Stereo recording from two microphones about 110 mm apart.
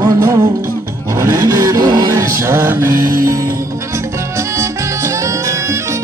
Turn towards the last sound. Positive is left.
turn(degrees=-25)  # may be behind; listen again after turning